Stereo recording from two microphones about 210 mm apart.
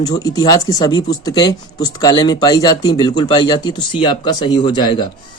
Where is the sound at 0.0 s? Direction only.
15° left (ahead or behind).